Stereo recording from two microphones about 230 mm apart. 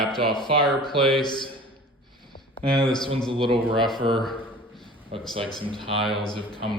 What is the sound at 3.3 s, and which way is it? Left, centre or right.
Speech, right.